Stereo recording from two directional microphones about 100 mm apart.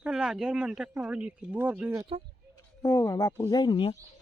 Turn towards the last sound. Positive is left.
turn(degrees=60)  # may be behind; listen again after turning